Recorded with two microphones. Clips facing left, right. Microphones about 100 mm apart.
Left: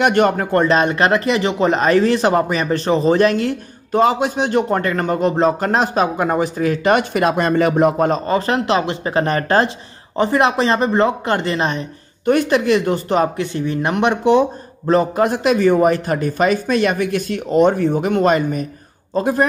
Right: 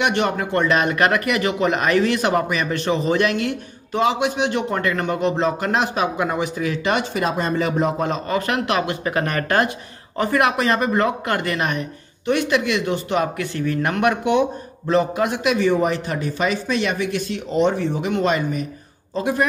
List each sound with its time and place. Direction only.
0.0 s speech: 45° left (ahead or behind)
8.1 s speech: 30° left (ahead or behind)
12.3 s speech: 40° left (ahead or behind)
13.4 s speech: 20° left (ahead or behind)
14.2 s speech: 35° left (ahead or behind)